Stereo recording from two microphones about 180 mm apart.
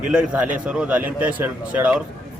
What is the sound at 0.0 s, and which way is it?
Speech, 5° right (ahead or behind).